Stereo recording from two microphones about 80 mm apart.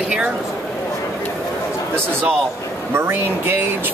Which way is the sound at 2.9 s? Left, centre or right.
Right.